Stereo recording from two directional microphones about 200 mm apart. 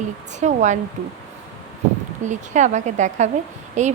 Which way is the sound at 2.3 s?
35° right (ahead or behind).